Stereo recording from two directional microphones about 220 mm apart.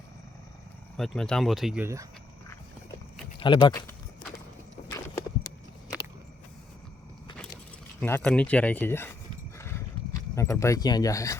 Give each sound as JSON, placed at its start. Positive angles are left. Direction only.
{"t": 0.9, "sound": "speech", "side_deg": 0}
{"t": 3.4, "sound": "speech", "side_deg": 20}
{"t": 4.9, "sound": "a sound", "side_deg": 15}
{"t": 8.0, "sound": "speech", "side_deg": 10}
{"t": 9.6, "sound": "horse", "side_deg": 10}